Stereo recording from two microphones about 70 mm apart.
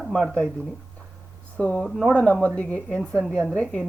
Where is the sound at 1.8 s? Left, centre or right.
Centre.